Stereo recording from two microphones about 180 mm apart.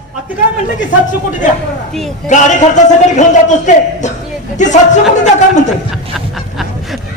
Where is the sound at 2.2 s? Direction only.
40° left (ahead or behind).